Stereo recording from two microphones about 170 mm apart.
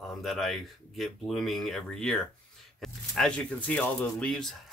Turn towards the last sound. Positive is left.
turn(degrees=5)  # may be behind; listen again after turning